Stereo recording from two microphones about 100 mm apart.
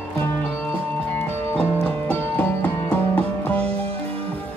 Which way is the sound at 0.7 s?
15° left (ahead or behind).